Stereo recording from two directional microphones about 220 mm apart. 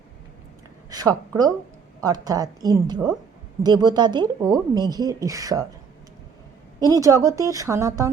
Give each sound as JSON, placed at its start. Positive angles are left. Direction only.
{"t": 0.9, "sound": "a woman's voice", "side_deg": -15}
{"t": 6.9, "sound": "speech", "side_deg": -15}